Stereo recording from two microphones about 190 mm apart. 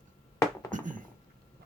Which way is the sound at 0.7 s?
45° right (ahead or behind).